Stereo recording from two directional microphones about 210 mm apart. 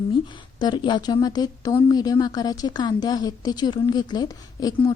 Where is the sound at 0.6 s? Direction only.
20° left (ahead or behind).